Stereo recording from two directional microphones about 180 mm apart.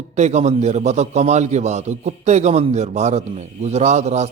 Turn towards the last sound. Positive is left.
turn(degrees=-40)  # may be behind; listen again after turning